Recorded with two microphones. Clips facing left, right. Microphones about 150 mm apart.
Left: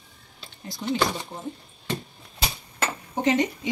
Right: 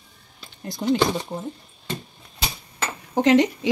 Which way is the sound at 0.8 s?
60° right (ahead or behind).